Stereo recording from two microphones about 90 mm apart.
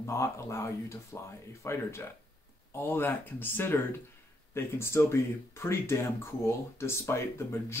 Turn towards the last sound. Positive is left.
turn(degrees=30)  # may be behind; listen again after turning